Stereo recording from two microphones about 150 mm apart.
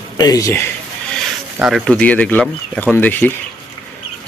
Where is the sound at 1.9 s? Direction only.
10° left (ahead or behind).